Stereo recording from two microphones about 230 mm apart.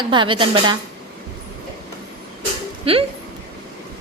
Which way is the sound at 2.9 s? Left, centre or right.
Right.